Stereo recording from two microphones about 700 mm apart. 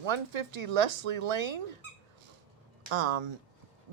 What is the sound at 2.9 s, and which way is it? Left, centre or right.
Speech, right.